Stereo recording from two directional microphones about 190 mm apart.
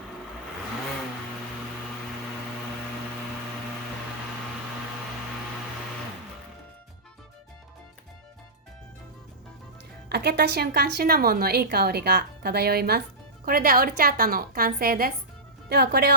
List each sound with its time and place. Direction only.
10.1 s a woman's voice: 60° right (ahead or behind)